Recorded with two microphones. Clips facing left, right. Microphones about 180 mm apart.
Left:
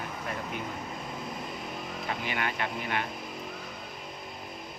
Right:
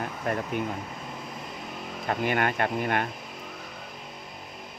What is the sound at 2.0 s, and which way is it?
Speech, 50° right (ahead or behind).